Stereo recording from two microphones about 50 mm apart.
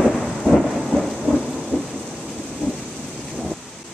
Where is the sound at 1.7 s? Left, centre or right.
Left.